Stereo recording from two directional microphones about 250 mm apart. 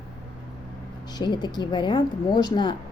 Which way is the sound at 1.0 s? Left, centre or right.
Centre.